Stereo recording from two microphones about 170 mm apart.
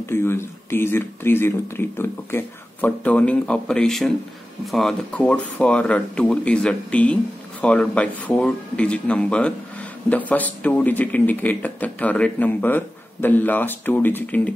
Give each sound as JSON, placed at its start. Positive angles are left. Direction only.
{"t": 0.0, "sound": "speech", "side_deg": 15}